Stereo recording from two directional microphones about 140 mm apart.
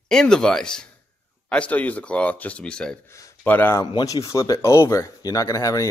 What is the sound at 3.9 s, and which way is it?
Speech, 25° left (ahead or behind).